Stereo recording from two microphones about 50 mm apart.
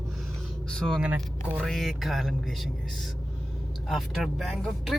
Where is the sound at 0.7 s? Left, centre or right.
Centre.